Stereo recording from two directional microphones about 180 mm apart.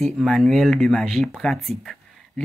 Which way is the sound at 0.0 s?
Centre (ahead or behind).